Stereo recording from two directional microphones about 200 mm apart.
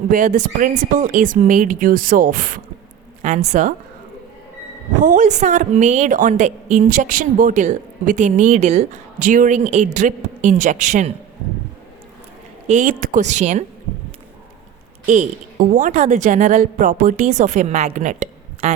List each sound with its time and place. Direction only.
0.1 s a woman's voice: 40° right (ahead or behind)
4.9 s a woman's voice: 40° right (ahead or behind)
12.6 s a woman's voice: 40° right (ahead or behind)
15.0 s a woman's voice: 40° right (ahead or behind)